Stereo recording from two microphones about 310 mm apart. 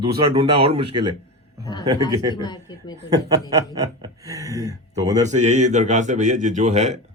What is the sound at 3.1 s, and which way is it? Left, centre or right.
Speech, centre.